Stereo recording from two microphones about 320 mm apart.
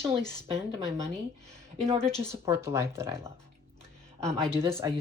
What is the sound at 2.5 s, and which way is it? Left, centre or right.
Speech, centre.